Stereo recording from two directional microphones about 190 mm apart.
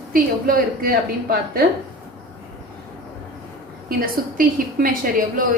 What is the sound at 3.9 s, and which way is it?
A woman's voice, 50° right (ahead or behind).